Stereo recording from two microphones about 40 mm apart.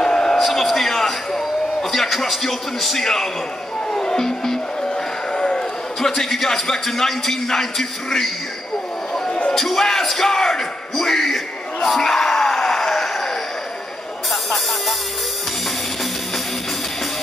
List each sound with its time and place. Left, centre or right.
0.0 s a sound: centre
0.4 s a sound: centre
3.9 s music: centre
5.9 s speech: centre
9.3 s basketball bounce: left
9.6 s speech: centre
14.3 s music: centre